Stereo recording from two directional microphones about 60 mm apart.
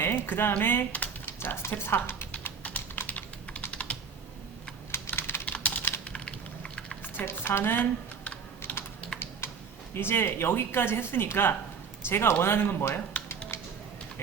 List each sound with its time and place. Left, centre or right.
0.0 s a sound: left
0.6 s speech: left
1.2 s a sound: left
1.9 s speech: left
2.6 s typing: left
3.7 s computer keyboard: centre
4.9 s computer keyboard: left
5.5 s typing: left
7.2 s speech: left
8.2 s typing: left
9.9 s speech: left